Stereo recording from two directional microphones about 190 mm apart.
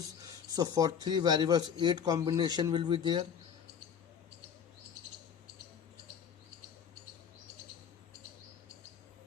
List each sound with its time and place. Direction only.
0.2 s a man's voice: 20° right (ahead or behind)